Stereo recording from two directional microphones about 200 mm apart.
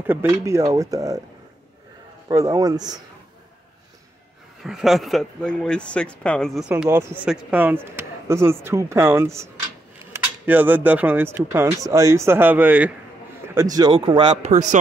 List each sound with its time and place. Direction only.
0.0 s speech: 10° right (ahead or behind)
2.2 s speech: 15° right (ahead or behind)
4.6 s speech: centre (ahead or behind)
6.7 s speech: 10° right (ahead or behind)
13.9 s speech: 25° right (ahead or behind)